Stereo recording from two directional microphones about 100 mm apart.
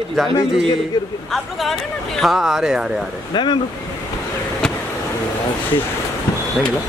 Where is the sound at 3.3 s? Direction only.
50° left (ahead or behind).